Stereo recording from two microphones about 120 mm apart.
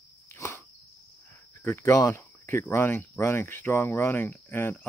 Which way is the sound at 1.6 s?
20° left (ahead or behind).